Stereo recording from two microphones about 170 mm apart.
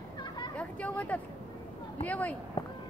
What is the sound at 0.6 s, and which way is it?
Speech, 5° left (ahead or behind).